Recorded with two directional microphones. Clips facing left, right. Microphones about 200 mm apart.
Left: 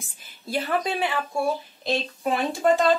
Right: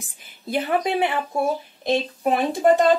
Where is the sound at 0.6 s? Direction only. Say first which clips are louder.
Right 4 dB; 15° right (ahead or behind).